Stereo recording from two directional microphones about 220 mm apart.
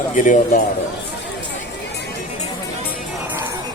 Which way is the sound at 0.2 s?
35° left (ahead or behind).